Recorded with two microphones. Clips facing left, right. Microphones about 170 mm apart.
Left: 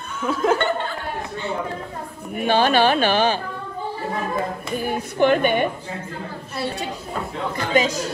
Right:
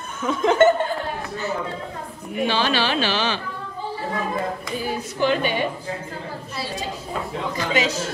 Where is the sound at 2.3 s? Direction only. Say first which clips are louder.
Left 4 dB; 50° left (ahead or behind).